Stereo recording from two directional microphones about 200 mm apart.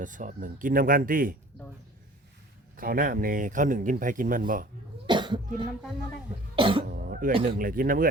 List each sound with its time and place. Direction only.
0.0 s speech: 40° right (ahead or behind)
2.7 s speech: 45° right (ahead or behind)
5.0 s cough: 25° right (ahead or behind)
6.6 s cough: 25° right (ahead or behind)
6.9 s cough: 45° right (ahead or behind)
7.4 s speech: 45° right (ahead or behind)